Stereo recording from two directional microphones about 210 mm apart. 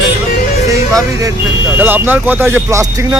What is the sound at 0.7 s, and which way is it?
Speech, 15° right (ahead or behind).